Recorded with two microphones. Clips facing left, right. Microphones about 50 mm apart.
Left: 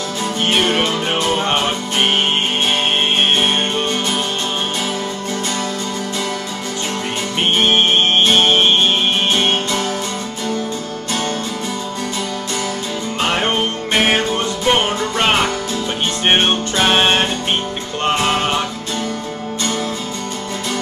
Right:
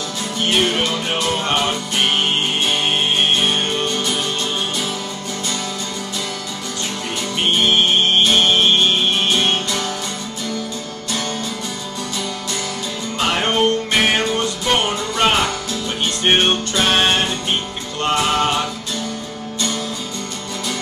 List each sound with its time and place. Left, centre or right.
0.5 s music: left
3.2 s music: left
7.5 s music: left
13.2 s music: left